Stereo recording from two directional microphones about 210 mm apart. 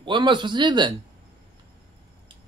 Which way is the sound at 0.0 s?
20° right (ahead or behind).